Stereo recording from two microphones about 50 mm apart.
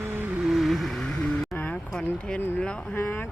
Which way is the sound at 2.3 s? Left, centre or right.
Left.